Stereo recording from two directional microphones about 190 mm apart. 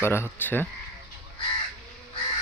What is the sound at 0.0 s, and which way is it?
Speech, 10° left (ahead or behind).